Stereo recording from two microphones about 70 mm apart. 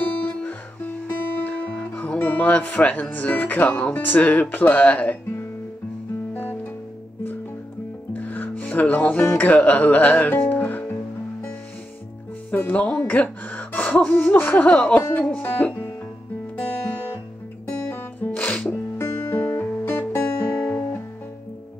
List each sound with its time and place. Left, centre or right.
0.0 s music: left
8.1 s music: left
9.4 s speech: left
12.4 s speech: centre
17.9 s music: left
18.9 s music: left
19.3 s music: left
20.5 s music: centre